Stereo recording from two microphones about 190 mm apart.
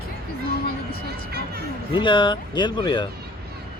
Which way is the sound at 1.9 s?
25° left (ahead or behind).